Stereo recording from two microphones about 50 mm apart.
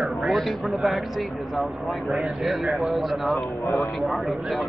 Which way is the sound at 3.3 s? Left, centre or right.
Left.